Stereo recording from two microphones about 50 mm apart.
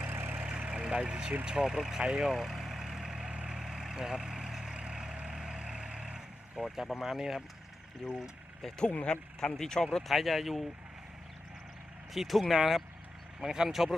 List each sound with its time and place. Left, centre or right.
0.0 s vehicle: right
0.7 s speech: centre
2.3 s vehicle: centre
6.6 s speech: centre
8.0 s speech: centre
9.0 s speech: centre
10.1 s speech: centre
12.1 s speech: centre